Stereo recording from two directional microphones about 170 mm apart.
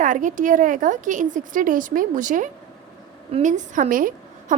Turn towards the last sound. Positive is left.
turn(degrees=-55)  # may be behind; listen again after turning